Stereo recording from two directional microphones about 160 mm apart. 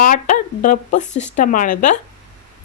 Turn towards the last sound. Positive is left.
turn(degrees=55)  # may be behind; listen again after turning